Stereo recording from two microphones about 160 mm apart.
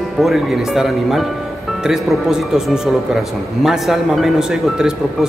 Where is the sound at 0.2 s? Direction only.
Centre (ahead or behind).